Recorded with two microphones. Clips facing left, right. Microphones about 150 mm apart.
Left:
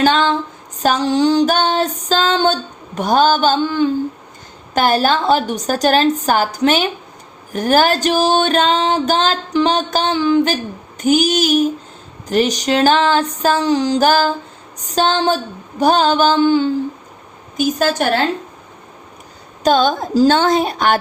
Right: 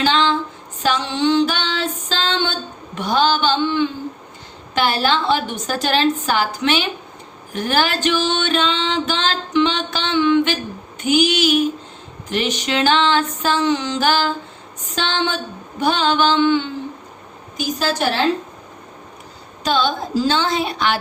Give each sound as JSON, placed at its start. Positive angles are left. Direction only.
{"t": 0.0, "sound": "a sound", "side_deg": 45}
{"t": 0.8, "sound": "female singing", "side_deg": 40}
{"t": 7.5, "sound": "music", "side_deg": 40}
{"t": 17.6, "sound": "female singing", "side_deg": 50}
{"t": 19.6, "sound": "female singing", "side_deg": 45}